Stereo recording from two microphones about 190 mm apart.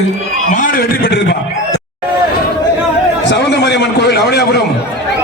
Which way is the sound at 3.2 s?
65° left (ahead or behind).